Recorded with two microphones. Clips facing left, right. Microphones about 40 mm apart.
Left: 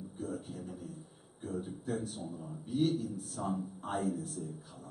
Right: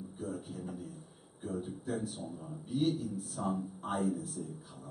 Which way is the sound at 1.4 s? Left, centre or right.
Centre.